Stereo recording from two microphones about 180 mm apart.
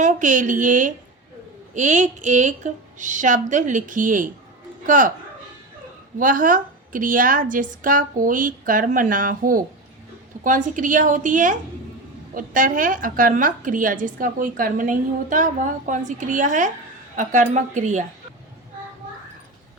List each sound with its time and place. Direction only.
0.0 s a woman's voice: 45° right (ahead or behind)
6.1 s a woman's voice: 45° right (ahead or behind)